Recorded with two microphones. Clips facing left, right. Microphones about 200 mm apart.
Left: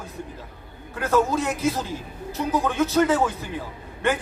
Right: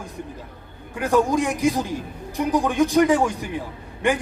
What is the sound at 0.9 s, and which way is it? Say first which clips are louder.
A man's voice: right 2 dB; 15° right (ahead or behind).